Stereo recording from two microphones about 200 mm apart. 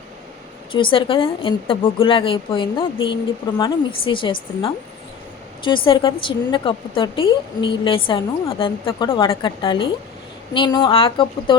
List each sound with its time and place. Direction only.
0.7 s a woman's voice: 25° left (ahead or behind)